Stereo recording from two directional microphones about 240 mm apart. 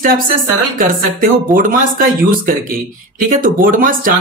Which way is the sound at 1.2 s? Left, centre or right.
Right.